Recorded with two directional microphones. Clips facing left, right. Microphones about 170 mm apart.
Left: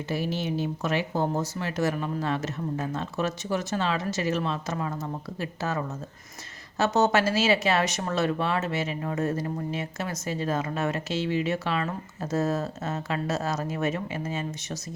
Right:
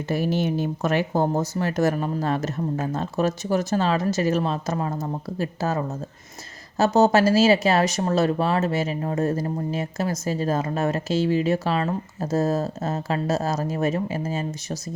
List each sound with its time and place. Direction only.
0.1 s speech: 50° right (ahead or behind)